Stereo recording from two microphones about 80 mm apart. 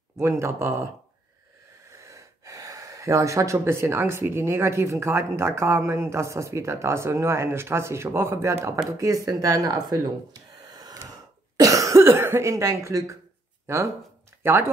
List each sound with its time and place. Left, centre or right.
0.2 s speech: right
1.9 s speech: right
11.0 s cough: right
13.7 s speech: right